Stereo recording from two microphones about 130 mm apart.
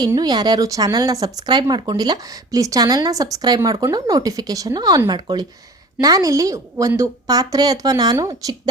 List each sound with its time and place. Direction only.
0.2 s speech: 30° right (ahead or behind)